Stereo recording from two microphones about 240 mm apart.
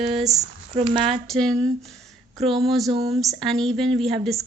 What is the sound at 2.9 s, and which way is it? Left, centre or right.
Speech, right.